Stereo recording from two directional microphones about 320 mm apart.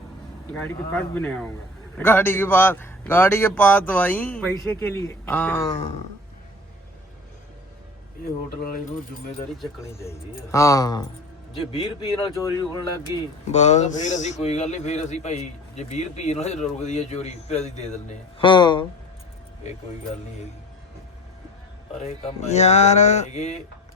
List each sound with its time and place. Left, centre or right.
0.5 s a man's voice: centre
9.6 s speech: centre
13.5 s a man's voice: left
21.9 s a man's voice: centre